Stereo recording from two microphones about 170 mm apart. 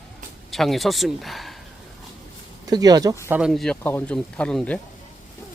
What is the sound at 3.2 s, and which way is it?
Speech, 10° right (ahead or behind).